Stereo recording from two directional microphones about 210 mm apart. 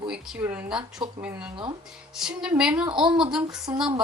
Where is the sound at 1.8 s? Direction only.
Centre (ahead or behind).